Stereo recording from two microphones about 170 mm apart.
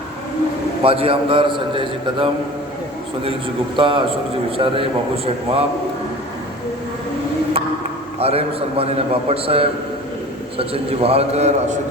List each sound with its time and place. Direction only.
0.8 s a man's voice: 35° right (ahead or behind)
3.8 s a man's voice: 30° right (ahead or behind)
8.2 s a man's voice: 35° right (ahead or behind)